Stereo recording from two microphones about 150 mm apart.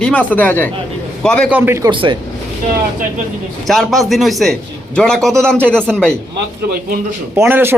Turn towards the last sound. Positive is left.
turn(degrees=-15)  # may be behind; listen again after turning